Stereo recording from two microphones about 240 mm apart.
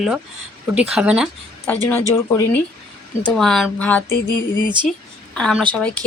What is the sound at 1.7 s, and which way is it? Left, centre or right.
Speech, centre.